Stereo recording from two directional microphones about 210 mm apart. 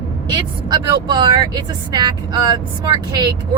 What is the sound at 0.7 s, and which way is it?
Speech, 20° right (ahead or behind).